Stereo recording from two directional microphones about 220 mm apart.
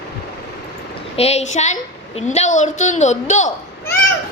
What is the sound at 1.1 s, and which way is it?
A woman's voice, 30° left (ahead or behind).